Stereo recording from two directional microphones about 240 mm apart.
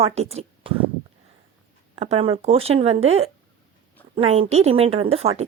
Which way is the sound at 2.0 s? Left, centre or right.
Right.